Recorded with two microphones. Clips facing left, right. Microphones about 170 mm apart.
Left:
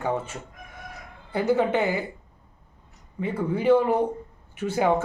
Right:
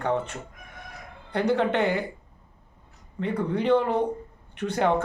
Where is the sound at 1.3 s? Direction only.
5° left (ahead or behind).